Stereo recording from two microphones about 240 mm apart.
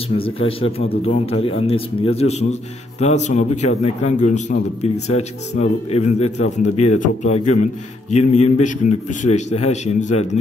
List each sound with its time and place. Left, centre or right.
0.2 s a man's voice: left